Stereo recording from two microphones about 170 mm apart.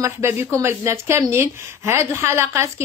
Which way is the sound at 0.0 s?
15° right (ahead or behind).